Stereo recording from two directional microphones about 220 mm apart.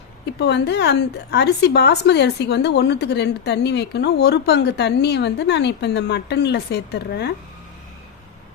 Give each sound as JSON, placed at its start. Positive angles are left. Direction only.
{"t": 0.3, "sound": "a woman's voice", "side_deg": 50}